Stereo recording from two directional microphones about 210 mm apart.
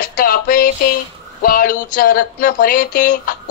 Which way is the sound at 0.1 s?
40° left (ahead or behind).